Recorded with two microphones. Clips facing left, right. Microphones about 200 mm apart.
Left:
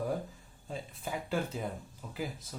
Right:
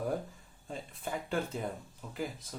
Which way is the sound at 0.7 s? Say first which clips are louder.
Even; centre (ahead or behind).